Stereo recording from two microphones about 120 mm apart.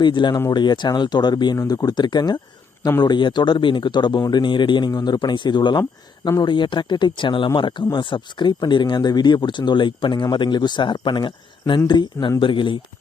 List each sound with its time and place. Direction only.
0.0 s speech: 40° left (ahead or behind)